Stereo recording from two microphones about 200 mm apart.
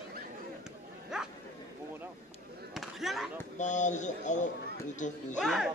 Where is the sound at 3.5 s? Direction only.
35° left (ahead or behind).